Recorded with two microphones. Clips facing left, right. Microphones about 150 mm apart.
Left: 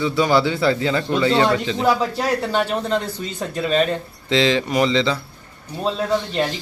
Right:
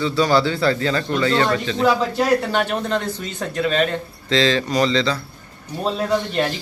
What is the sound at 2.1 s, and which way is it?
Speech, 5° right (ahead or behind).